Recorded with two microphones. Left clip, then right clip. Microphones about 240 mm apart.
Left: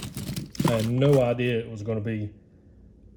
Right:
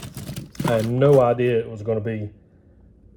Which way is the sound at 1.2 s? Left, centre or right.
Right.